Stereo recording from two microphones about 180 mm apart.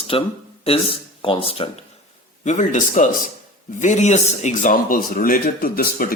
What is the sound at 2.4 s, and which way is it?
Speech, 45° left (ahead or behind).